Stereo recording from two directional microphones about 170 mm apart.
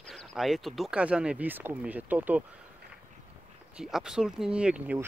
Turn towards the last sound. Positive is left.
turn(degrees=-5)  # may be behind; listen again after turning